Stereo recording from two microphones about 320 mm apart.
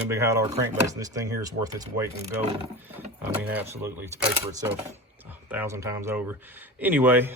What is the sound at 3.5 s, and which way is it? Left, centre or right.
Speech, centre.